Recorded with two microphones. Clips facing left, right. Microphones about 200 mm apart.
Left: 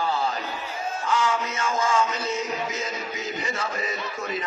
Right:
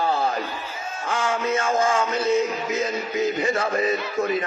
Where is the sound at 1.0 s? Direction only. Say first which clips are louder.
Right 2 dB; 55° right (ahead or behind).